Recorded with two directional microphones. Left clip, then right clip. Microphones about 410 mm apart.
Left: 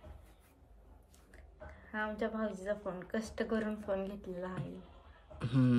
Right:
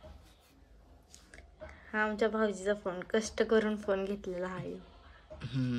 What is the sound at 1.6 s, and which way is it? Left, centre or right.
A woman's voice, right.